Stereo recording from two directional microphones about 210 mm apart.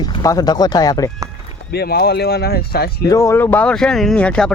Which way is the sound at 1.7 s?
50° left (ahead or behind).